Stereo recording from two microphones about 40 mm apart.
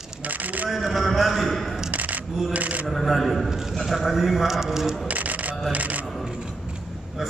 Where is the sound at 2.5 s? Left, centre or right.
Right.